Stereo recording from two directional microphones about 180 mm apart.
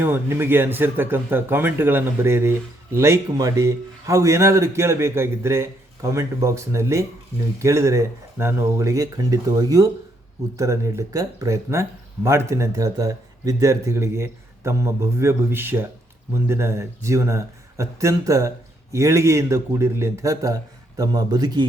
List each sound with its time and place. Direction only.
0.0 s speech: 10° right (ahead or behind)